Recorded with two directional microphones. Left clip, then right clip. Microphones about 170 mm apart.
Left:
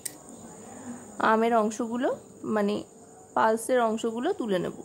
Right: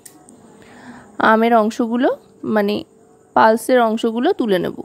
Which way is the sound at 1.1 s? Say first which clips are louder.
Right 10 dB; 40° right (ahead or behind).